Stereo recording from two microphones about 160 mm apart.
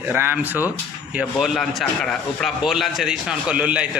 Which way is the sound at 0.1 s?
15° right (ahead or behind).